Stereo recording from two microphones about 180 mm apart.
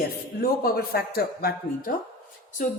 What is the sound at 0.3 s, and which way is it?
A man's voice, 55° left (ahead or behind).